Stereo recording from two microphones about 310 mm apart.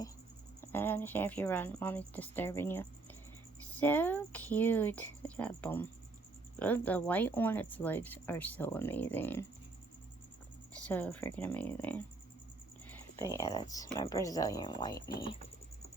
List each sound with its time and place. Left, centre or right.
0.6 s speech: centre
10.8 s speech: centre